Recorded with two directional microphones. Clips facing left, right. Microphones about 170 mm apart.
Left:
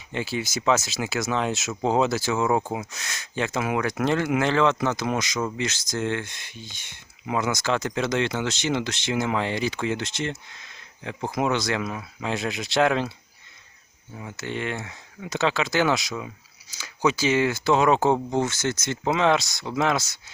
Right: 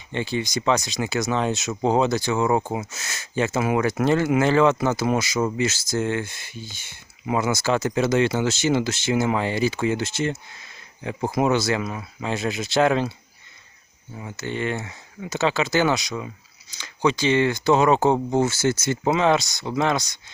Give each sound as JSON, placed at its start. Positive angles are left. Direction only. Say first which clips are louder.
{"t": 0.1, "sound": "speech", "louder": "right 3 dB", "side_deg": 5}
{"t": 14.2, "sound": "speech", "louder": "right 3 dB", "side_deg": 0}